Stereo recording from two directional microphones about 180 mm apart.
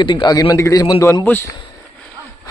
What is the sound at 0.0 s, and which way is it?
A man's voice, 25° left (ahead or behind).